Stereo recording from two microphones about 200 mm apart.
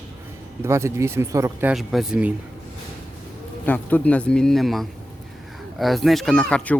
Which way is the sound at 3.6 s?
10° left (ahead or behind).